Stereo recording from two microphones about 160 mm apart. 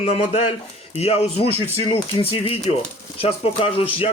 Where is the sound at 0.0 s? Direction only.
40° left (ahead or behind).